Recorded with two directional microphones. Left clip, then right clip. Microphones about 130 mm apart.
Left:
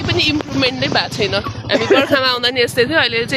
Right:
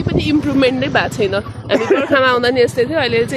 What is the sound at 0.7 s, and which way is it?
Speech, 90° right.